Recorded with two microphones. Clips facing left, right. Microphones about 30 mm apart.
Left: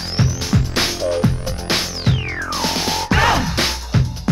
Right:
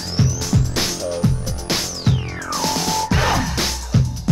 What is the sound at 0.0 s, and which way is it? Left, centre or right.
Music, left.